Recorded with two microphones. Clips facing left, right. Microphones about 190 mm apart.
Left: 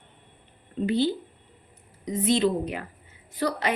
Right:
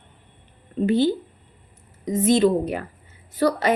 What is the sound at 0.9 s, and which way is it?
A woman's voice, 50° right (ahead or behind).